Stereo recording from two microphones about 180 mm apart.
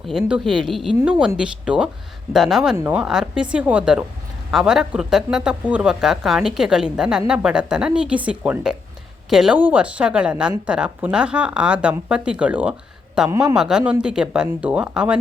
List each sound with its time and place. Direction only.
0.1 s speech: 5° right (ahead or behind)
13.3 s speech: 20° right (ahead or behind)
13.6 s speech: 5° right (ahead or behind)